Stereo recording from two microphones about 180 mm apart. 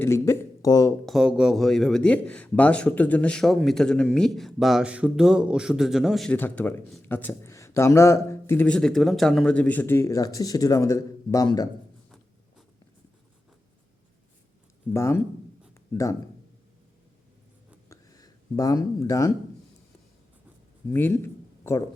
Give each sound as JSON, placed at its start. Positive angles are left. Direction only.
{"t": 0.0, "sound": "speech", "side_deg": 15}
{"t": 1.0, "sound": "a man's voice", "side_deg": 0}
{"t": 14.9, "sound": "speech", "side_deg": 15}
{"t": 15.7, "sound": "a sound", "side_deg": 15}
{"t": 17.8, "sound": "a sound", "side_deg": 20}
{"t": 20.9, "sound": "speech", "side_deg": 10}